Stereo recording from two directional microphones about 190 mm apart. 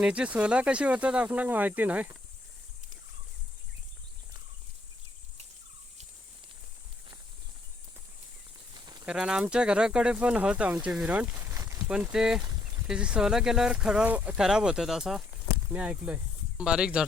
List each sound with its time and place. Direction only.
0.0 s speech: 5° right (ahead or behind)
8.7 s a sound: 20° right (ahead or behind)
9.0 s speech: 5° right (ahead or behind)
11.9 s speech: 5° right (ahead or behind)